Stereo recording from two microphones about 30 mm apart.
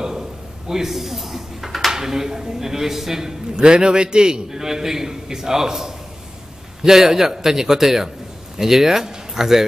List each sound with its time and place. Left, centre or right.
0.0 s a sound: centre
1.9 s a man's voice: centre
4.6 s a man's voice: centre